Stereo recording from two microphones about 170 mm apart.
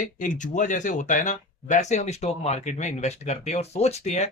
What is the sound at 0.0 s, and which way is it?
Speech, 50° left (ahead or behind).